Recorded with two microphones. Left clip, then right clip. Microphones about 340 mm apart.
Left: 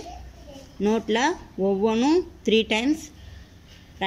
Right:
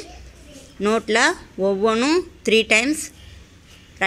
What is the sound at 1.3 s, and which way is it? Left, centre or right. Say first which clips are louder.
Speech: right 3 dB; right.